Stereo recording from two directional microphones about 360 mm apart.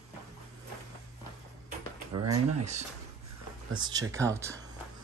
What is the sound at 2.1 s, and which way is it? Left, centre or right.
Speech, right.